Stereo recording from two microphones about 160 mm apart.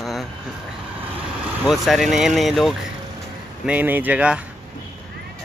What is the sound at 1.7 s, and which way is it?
Speech, centre (ahead or behind).